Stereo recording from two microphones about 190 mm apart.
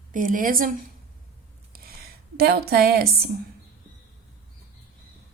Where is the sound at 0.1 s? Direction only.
45° right (ahead or behind).